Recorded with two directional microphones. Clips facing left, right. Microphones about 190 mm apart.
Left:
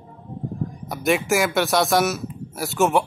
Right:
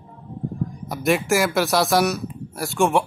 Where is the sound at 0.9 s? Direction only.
Centre (ahead or behind).